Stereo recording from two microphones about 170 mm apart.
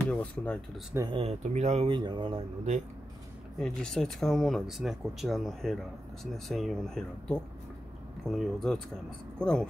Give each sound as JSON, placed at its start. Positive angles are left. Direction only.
{"t": 0.0, "sound": "speech", "side_deg": 5}
{"t": 0.9, "sound": "speech", "side_deg": -25}
{"t": 3.5, "sound": "speech", "side_deg": 5}